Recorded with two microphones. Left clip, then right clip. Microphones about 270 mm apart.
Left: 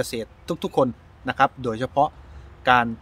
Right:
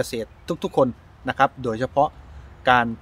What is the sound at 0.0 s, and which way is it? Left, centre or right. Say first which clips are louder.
Speech: right 1 dB; centre.